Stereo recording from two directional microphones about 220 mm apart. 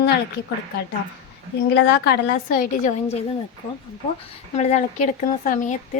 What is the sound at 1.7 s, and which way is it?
A woman's voice, 50° left (ahead or behind).